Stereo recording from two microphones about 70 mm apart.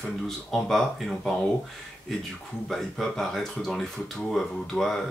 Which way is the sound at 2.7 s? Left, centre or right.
Centre.